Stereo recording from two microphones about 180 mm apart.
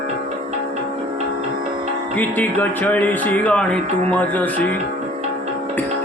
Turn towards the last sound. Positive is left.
turn(degrees=10)  # may be behind; listen again after turning